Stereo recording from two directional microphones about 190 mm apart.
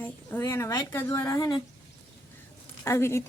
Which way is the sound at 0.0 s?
10° left (ahead or behind).